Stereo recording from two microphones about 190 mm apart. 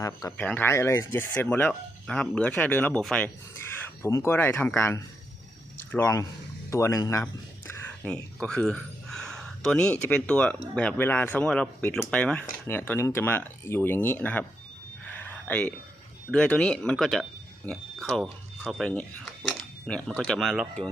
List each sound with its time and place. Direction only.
0.0 s speech: 15° left (ahead or behind)
15.1 s a sound: 10° left (ahead or behind)
16.3 s speech: 5° left (ahead or behind)